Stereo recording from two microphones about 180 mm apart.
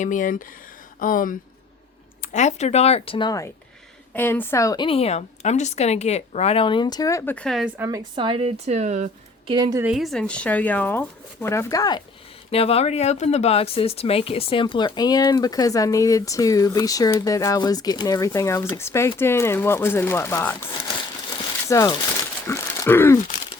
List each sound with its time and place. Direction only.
0.0 s speech: 45° left (ahead or behind); by 3.5 s 20° left (ahead or behind)
4.1 s speech: 10° left (ahead or behind)
4.9 s speech: 35° left (ahead or behind); by 7.7 s centre (ahead or behind)
7.8 s a woman's voice: 20° right (ahead or behind); by 9.0 s 40° right (ahead or behind)
9.9 s speech: centre (ahead or behind); by 12.0 s 20° left (ahead or behind)
12.5 s speech: 35° left (ahead or behind); by 20.7 s 10° left (ahead or behind)
21.7 s speech: 20° left (ahead or behind)